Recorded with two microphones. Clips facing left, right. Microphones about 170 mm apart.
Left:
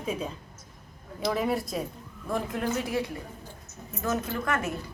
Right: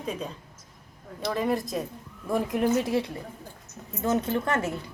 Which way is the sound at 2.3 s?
20° right (ahead or behind).